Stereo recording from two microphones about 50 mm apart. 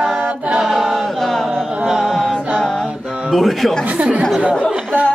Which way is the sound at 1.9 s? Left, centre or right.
Centre.